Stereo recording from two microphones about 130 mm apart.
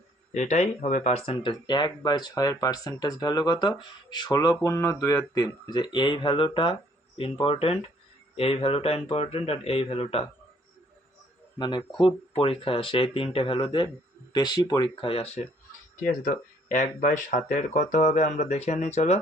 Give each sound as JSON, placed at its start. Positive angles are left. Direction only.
{"t": 0.3, "sound": "speech", "side_deg": 60}
{"t": 1.3, "sound": "speech", "side_deg": 40}
{"t": 11.5, "sound": "speech", "side_deg": 35}
{"t": 15.0, "sound": "speech", "side_deg": 45}
{"t": 16.0, "sound": "speech", "side_deg": 85}